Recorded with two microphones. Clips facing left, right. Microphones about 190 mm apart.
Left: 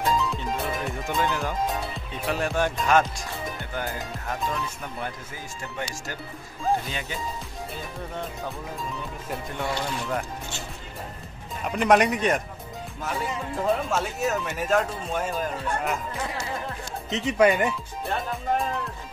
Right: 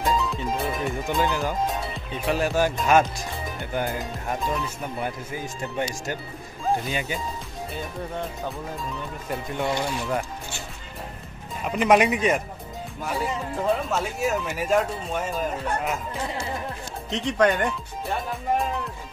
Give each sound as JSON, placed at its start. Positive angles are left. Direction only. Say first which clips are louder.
{"t": 0.0, "sound": "music", "louder": "right 1 dB", "side_deg": 0}
{"t": 3.7, "sound": "speech", "louder": "right 7 dB", "side_deg": -15}
{"t": 9.7, "sound": "speech", "louder": "right 3 dB", "side_deg": -15}
{"t": 11.6, "sound": "speech", "louder": "right 1 dB", "side_deg": 0}
{"t": 17.1, "sound": "speech", "louder": "left 1 dB", "side_deg": 5}